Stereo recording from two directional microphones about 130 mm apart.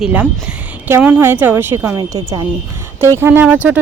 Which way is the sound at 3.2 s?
15° right (ahead or behind).